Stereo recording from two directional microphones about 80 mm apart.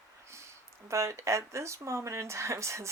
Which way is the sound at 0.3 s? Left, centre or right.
Right.